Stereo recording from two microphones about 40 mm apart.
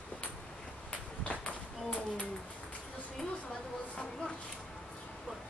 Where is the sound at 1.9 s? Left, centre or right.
Left.